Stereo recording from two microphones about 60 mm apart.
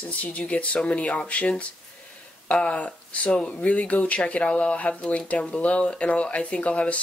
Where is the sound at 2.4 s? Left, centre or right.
Left.